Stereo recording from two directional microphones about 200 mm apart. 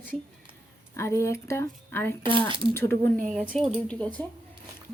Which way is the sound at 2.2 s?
25° right (ahead or behind).